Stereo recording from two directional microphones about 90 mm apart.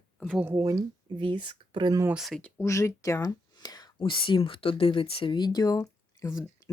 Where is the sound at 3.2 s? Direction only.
45° left (ahead or behind).